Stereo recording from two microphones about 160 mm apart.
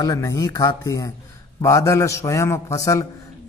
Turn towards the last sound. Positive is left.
turn(degrees=20)  # may be behind; listen again after turning